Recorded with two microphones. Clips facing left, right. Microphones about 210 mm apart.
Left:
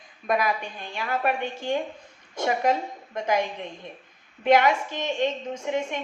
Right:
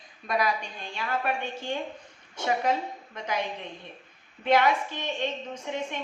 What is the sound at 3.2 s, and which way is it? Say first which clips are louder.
Speech: left 7 dB; 50° left (ahead or behind).